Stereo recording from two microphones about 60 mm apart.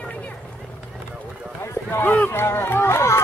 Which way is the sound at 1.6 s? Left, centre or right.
Left.